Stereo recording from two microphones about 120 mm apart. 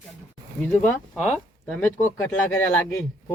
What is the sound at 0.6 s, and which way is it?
Speech, 10° left (ahead or behind).